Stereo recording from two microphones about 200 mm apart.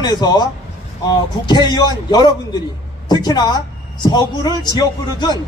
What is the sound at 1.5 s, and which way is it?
A man's voice, 20° left (ahead or behind).